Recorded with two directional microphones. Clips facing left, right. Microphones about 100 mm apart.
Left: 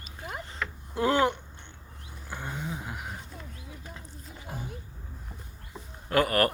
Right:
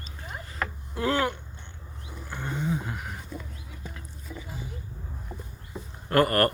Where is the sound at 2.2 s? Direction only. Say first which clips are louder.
Right 5 dB; 10° left (ahead or behind).